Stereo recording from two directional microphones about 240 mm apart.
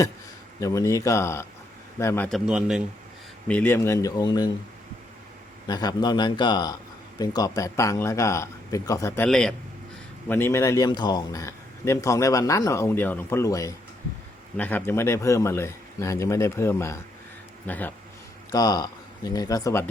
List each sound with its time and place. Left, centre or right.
0.6 s a man's voice: centre
5.6 s a man's voice: centre